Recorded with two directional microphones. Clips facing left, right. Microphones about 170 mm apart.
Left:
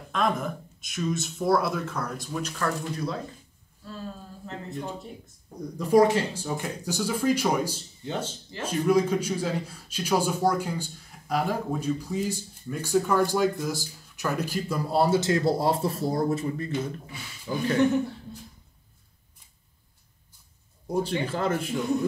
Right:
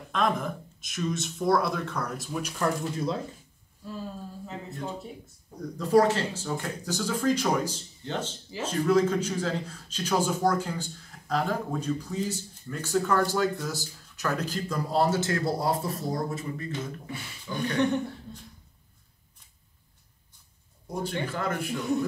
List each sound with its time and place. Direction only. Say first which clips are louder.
0.1 s speech: even; centre (ahead or behind)
3.8 s speech: right 1 dB; 15° right (ahead or behind)
5.8 s a man's voice: left 2 dB; 15° left (ahead or behind); by 16.7 s 30° left (ahead or behind)
17.7 s speech: left 3 dB; 5° left (ahead or behind)
21.3 s speech: left 4 dB; 30° left (ahead or behind)
21.7 s speech: right 2 dB; centre (ahead or behind)